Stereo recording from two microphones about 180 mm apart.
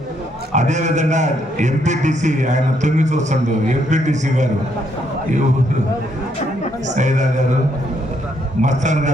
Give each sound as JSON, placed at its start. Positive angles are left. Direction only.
{"t": 0.5, "sound": "a man's voice", "side_deg": -40}
{"t": 6.8, "sound": "a man's voice", "side_deg": -40}
{"t": 8.6, "sound": "a man's voice", "side_deg": -40}